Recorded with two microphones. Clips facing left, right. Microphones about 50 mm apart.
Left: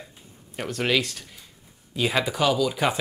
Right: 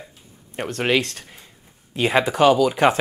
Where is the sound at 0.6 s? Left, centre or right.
Right.